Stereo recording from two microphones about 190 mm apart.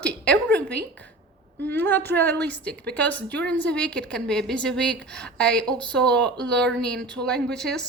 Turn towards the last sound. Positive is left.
turn(degrees=5)  # may be behind; listen again after turning